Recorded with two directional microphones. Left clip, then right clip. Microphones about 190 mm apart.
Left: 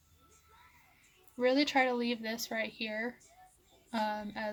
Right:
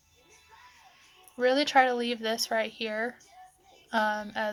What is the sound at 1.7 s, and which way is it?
Speech, 10° left (ahead or behind).